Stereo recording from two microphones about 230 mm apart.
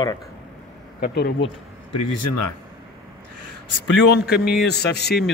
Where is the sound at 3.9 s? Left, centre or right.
Left.